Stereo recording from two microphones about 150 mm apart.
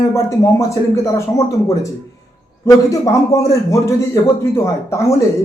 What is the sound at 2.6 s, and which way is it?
A man's voice, 20° left (ahead or behind).